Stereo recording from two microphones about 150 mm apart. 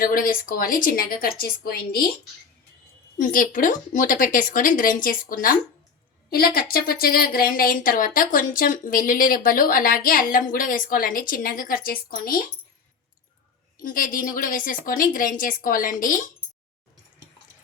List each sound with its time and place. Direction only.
0.0 s a woman's voice: 70° left (ahead or behind); by 2.0 s 85° left
3.2 s speech: 60° left (ahead or behind)
6.3 s a woman's voice: 80° left
13.8 s speech: 65° left (ahead or behind)